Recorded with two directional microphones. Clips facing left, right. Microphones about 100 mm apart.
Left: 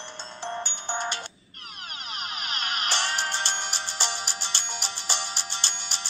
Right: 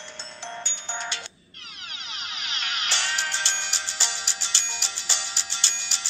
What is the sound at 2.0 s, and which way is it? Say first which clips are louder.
Music: left 3 dB; 45° left (ahead or behind).